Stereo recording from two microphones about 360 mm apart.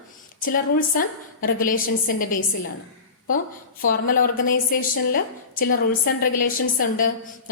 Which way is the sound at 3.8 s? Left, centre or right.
Left.